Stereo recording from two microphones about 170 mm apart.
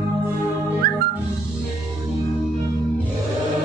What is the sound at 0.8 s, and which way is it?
Music, 65° right (ahead or behind).